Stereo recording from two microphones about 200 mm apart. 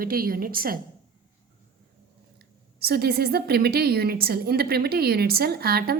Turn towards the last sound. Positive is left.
turn(degrees=-50)  # may be behind; listen again after turning